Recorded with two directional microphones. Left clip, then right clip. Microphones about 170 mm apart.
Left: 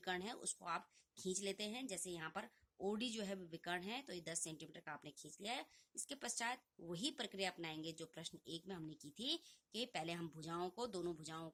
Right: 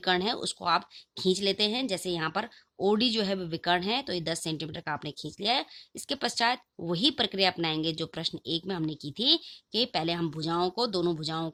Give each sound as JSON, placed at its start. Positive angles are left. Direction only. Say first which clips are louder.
{"t": 0.0, "sound": "speech", "louder": "right 18 dB", "side_deg": -25}